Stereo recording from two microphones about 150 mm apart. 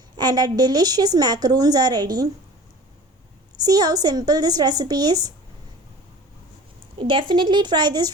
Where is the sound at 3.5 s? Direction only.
25° right (ahead or behind).